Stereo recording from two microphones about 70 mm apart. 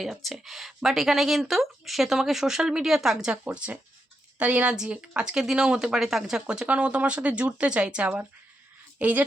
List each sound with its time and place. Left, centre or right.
0.0 s speech: centre
3.4 s a woman's voice: centre